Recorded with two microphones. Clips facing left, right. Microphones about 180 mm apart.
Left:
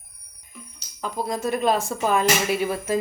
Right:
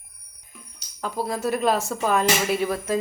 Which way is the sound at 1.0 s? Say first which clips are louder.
Even; 5° right (ahead or behind).